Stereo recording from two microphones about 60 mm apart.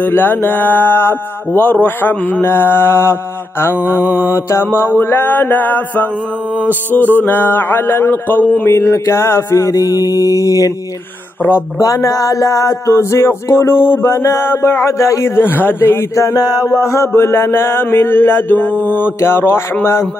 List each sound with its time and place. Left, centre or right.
0.0 s speech: left
8.6 s a man's voice: left
9.7 s mantra: left
11.8 s a sound: left
14.3 s a man's voice: left
16.3 s a sound: left
16.9 s speech: left
19.1 s a man's voice: left